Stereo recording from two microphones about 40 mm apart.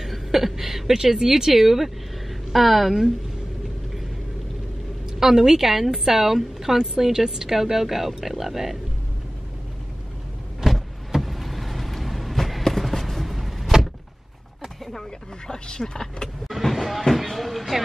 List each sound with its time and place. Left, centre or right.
0.0 s a woman's voice: centre
5.2 s a woman's voice: centre
10.6 s vehicle: centre
15.4 s speech: centre
16.4 s vehicle: centre
17.1 s a sound: centre